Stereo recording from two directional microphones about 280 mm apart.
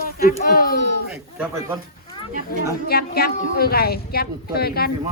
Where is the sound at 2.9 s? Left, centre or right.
Left.